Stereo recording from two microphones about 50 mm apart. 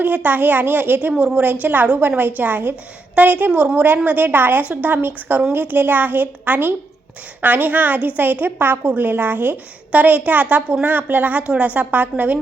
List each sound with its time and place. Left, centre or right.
0.0 s a woman's voice: right
3.5 s a woman's voice: right
3.8 s a woman's voice: right